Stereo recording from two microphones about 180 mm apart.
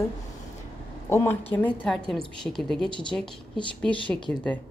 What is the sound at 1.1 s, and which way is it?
A woman's voice, 15° left (ahead or behind).